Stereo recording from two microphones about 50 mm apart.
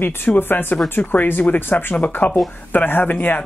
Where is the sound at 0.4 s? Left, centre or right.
Left.